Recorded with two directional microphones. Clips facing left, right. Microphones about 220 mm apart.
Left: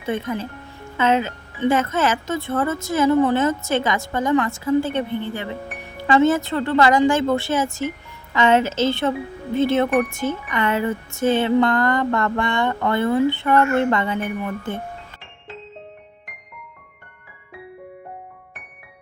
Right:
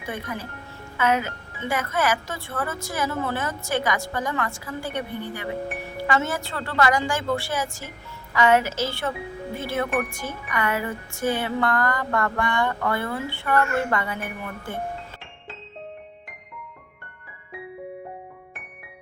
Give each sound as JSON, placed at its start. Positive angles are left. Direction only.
{"t": 0.0, "sound": "speech", "side_deg": 25}